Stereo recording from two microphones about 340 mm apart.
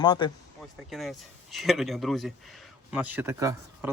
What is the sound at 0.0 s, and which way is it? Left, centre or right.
Speech, centre.